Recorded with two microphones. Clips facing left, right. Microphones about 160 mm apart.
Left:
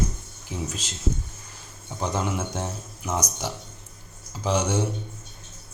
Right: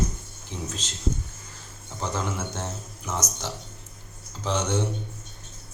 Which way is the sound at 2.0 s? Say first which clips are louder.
Left 3 dB; 15° left (ahead or behind).